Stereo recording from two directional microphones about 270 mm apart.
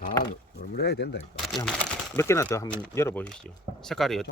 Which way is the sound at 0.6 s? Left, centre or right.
Left.